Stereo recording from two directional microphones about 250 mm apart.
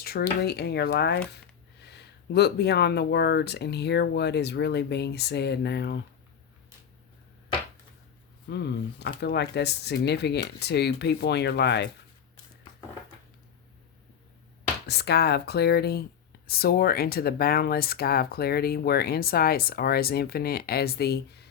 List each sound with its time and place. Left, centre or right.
0.0 s speech: left
8.4 s speech: left
14.8 s speech: left